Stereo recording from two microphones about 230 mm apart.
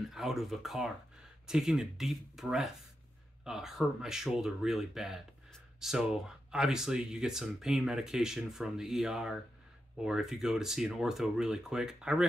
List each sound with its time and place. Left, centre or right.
0.1 s speech: centre